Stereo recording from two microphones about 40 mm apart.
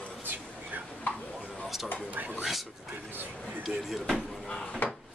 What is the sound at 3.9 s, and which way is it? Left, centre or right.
Speech, centre.